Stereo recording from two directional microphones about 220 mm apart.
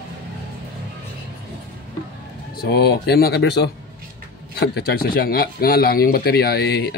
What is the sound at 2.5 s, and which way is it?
Speech, 45° left (ahead or behind).